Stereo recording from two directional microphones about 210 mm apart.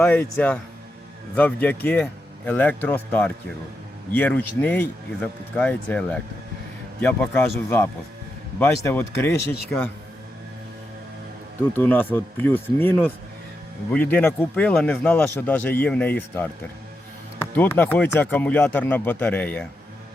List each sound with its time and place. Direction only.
0.0 s speech: 10° left (ahead or behind)
11.8 s speech: 10° left (ahead or behind)
17.5 s speech: 10° left (ahead or behind)